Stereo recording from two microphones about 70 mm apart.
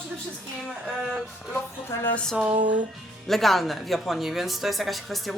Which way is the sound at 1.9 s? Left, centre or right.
Left.